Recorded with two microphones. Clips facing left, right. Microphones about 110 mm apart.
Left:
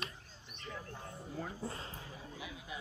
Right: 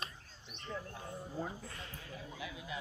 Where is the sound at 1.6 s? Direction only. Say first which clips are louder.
Left 5 dB; 30° left (ahead or behind).